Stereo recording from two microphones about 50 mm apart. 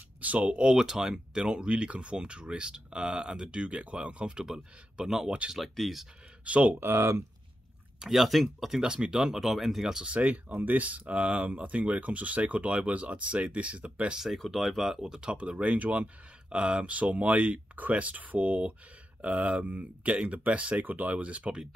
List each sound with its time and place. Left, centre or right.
0.2 s speech: right
4.5 s speech: centre
6.4 s speech: right
6.8 s speech: right
8.0 s speech: centre
8.8 s speech: centre
10.0 s speech: right
10.5 s speech: right
14.1 s speech: centre; by 16.1 s right
16.4 s speech: centre